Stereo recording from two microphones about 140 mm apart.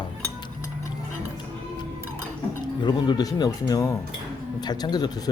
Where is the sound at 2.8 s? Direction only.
30° left (ahead or behind).